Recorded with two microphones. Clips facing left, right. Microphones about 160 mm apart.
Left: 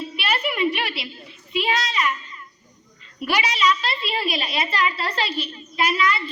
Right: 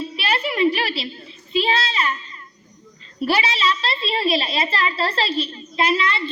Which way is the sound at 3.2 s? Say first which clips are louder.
Right 2 dB; 30° right (ahead or behind).